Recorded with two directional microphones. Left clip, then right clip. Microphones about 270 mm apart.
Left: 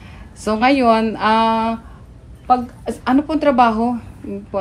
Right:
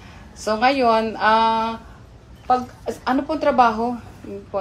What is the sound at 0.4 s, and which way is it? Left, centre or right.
Speech, left.